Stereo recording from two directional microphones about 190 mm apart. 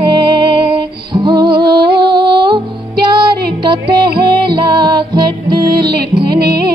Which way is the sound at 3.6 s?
25° right (ahead or behind).